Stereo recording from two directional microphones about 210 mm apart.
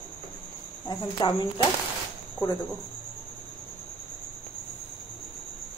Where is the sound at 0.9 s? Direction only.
20° left (ahead or behind).